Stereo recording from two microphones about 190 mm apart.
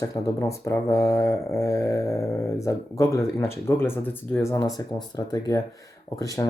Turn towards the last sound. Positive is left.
turn(degrees=20)  # may be behind; listen again after turning